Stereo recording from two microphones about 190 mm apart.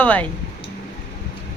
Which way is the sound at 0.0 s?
10° left (ahead or behind).